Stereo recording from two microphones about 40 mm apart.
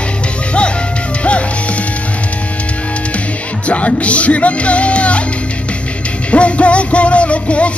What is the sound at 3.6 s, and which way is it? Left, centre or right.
Music, left.